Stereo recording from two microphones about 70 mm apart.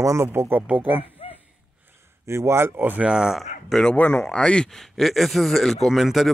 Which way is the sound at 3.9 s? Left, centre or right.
Left.